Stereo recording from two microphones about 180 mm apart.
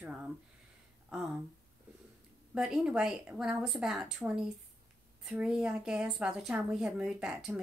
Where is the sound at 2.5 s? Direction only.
5° right (ahead or behind).